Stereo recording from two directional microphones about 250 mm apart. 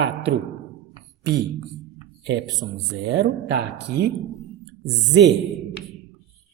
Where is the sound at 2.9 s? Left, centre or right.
Right.